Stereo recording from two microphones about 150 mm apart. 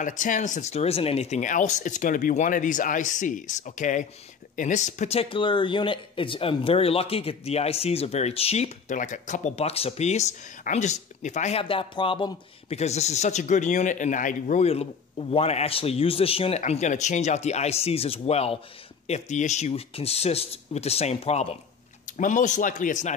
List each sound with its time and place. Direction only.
0.0 s speech: 60° left (ahead or behind)
11.6 s speech: 35° left (ahead or behind)
22.1 s speech: 55° left (ahead or behind)